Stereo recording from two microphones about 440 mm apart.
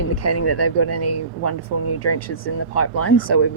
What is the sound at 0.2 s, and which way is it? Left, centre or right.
Speech, left.